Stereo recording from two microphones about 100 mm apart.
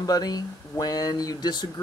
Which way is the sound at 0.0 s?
40° left (ahead or behind).